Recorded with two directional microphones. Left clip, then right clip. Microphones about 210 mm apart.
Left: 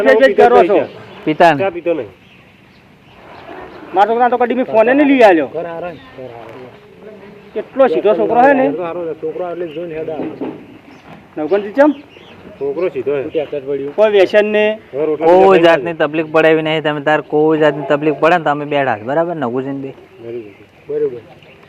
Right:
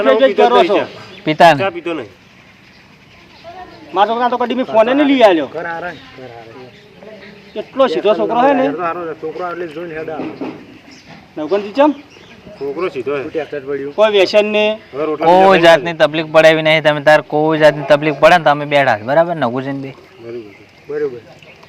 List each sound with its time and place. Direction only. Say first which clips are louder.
0.0 s speech: left 2 dB; 10° right (ahead or behind)
1.2 s speech: right 2 dB; 40° right (ahead or behind)
1.6 s speech: left 3 dB; 20° right (ahead or behind)
3.9 s speech: left 2 dB; 10° right (ahead or behind)
7.5 s speech: left 2 dB; 10° right (ahead or behind)
11.3 s speech: left 1 dB; 5° right (ahead or behind)
12.7 s speech: left 2 dB; 20° right (ahead or behind)
13.5 s speech: left 2 dB; 10° right (ahead or behind)
15.3 s a man's voice: right 1 dB; 50° right (ahead or behind)